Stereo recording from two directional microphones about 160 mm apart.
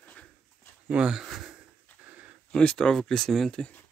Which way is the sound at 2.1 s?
10° right (ahead or behind).